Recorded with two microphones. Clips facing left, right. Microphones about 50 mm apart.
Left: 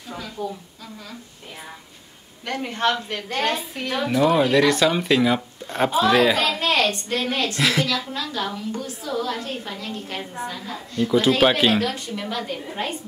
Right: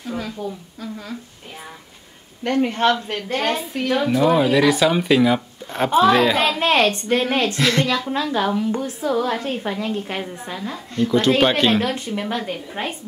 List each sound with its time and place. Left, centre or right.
2.4 s a woman's voice: right
4.0 s speech: centre
6.6 s a woman's voice: right
7.5 s speech: centre
7.8 s a woman's voice: centre
8.1 s a woman's voice: right
11.1 s speech: centre
11.8 s a woman's voice: right